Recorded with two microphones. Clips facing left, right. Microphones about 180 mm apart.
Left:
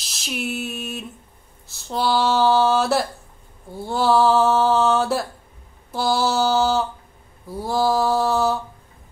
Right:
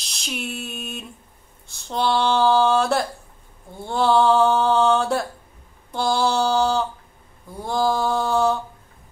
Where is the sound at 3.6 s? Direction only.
5° left (ahead or behind).